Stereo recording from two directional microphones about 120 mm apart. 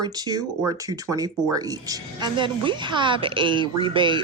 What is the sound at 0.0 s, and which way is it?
Speech, 35° right (ahead or behind).